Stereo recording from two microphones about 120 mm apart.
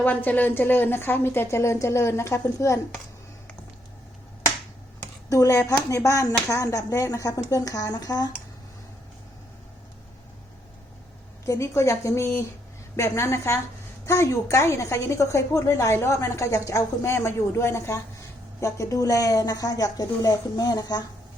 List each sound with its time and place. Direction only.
0.0 s a woman's voice: 15° left (ahead or behind)
5.3 s a woman's voice: 30° left (ahead or behind)
11.4 s a woman's voice: 25° left (ahead or behind)